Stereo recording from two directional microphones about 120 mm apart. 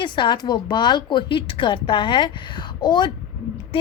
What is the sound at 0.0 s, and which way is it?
A woman's voice, 40° left (ahead or behind).